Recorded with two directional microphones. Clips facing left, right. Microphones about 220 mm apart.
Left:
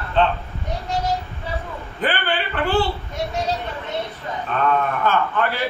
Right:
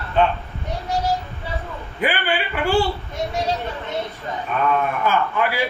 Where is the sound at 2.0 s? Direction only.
10° right (ahead or behind).